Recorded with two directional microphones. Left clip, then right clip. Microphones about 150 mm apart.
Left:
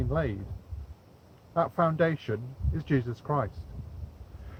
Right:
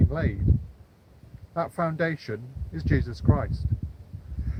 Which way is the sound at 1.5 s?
5° right (ahead or behind).